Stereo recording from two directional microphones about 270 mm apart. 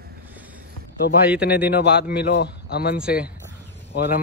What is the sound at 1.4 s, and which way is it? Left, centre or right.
A man's voice, left.